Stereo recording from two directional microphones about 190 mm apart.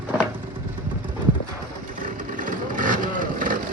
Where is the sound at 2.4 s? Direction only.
45° right (ahead or behind).